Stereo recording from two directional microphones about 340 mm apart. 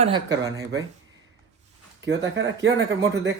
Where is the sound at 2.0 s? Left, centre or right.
Right.